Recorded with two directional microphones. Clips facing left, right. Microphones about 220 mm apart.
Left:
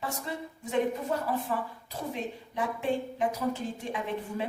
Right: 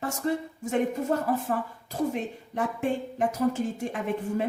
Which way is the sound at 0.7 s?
45° right (ahead or behind).